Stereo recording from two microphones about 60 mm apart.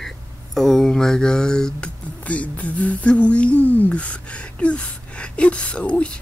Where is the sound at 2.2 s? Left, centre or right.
Left.